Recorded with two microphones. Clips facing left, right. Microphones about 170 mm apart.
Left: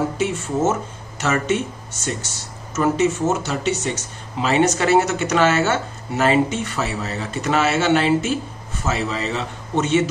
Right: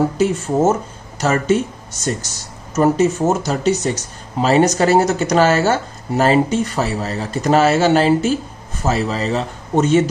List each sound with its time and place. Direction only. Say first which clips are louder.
0.2 s speech: right 5 dB; 35° right (ahead or behind)